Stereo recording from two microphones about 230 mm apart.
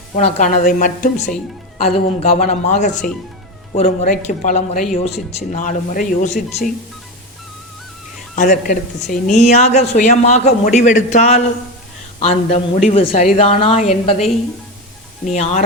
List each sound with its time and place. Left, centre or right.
0.3 s a woman's voice: left
8.4 s a woman's voice: left
15.2 s speech: left